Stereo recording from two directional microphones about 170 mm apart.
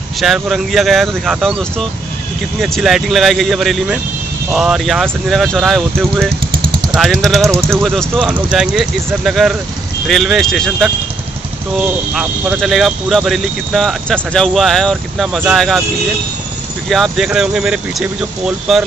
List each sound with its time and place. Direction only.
0.2 s speech: centre (ahead or behind)
7.4 s speech: 15° right (ahead or behind)
7.8 s speech: centre (ahead or behind)
12.1 s speech: 5° right (ahead or behind)
16.9 s speech: centre (ahead or behind)